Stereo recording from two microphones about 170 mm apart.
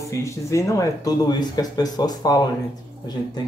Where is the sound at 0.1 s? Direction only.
15° left (ahead or behind).